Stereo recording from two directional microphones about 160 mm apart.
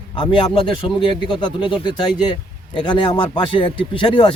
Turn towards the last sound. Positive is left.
turn(degrees=35)  # may be behind; listen again after turning